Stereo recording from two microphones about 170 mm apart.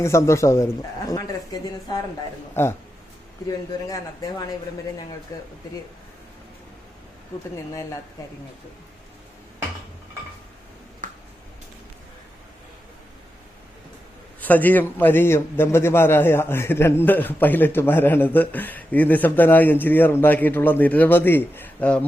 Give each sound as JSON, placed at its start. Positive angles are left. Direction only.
{"t": 0.0, "sound": "a man's voice", "side_deg": 15}
{"t": 2.6, "sound": "a man's voice", "side_deg": 15}
{"t": 3.8, "sound": "a man's voice", "side_deg": 20}
{"t": 7.5, "sound": "a man's voice", "side_deg": 15}
{"t": 11.0, "sound": "a sound", "side_deg": -50}
{"t": 14.4, "sound": "a man's voice", "side_deg": 10}